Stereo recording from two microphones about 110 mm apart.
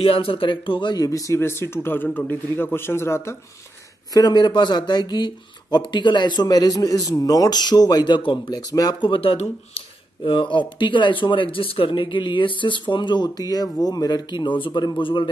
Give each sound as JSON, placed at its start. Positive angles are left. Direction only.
{"t": 0.0, "sound": "speech", "side_deg": 55}
{"t": 4.1, "sound": "speech", "side_deg": 40}
{"t": 8.5, "sound": "speech", "side_deg": 35}
{"t": 9.1, "sound": "speech", "side_deg": 55}
{"t": 10.3, "sound": "speech", "side_deg": 45}